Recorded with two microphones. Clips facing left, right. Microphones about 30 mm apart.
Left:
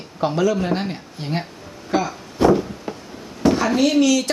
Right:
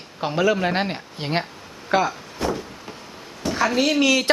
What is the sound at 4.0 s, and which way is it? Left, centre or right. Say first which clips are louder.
Speech: even; right.